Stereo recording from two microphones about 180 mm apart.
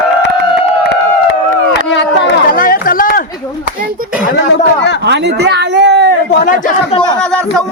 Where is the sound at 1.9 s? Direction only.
75° left (ahead or behind).